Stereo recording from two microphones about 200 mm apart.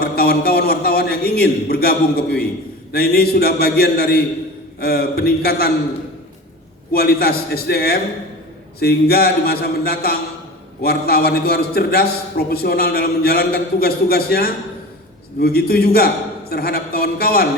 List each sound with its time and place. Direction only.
0.0 s a man's voice: 50° left (ahead or behind)
6.9 s a man's voice: 50° left (ahead or behind)